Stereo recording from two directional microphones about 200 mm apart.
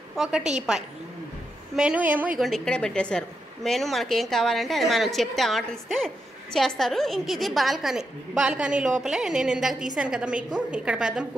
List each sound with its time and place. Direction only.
0.1 s a woman's voice: centre (ahead or behind)
0.4 s a woman's voice: 35° right (ahead or behind)
1.8 s a woman's voice: 5° right (ahead or behind)